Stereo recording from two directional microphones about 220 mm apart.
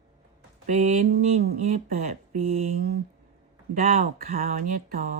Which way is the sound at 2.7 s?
40° right (ahead or behind).